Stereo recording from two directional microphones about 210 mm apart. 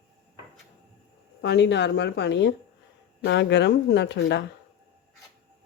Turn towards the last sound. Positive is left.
turn(degrees=55)  # may be behind; listen again after turning